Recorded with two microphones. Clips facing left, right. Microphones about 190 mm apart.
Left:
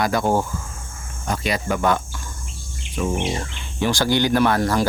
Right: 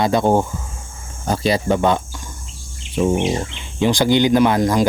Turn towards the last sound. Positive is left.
turn(degrees=-15)  # may be behind; listen again after turning